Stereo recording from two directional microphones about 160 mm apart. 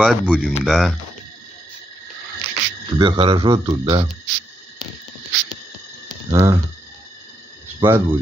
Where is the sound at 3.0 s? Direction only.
30° right (ahead or behind).